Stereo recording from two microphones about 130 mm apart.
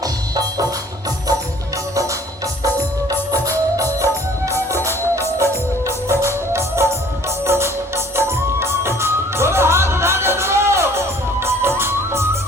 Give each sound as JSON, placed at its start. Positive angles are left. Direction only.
{"t": 0.0, "sound": "music", "side_deg": -30}
{"t": 3.1, "sound": "music", "side_deg": -25}